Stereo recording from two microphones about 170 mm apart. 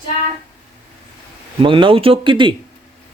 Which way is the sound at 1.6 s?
30° right (ahead or behind).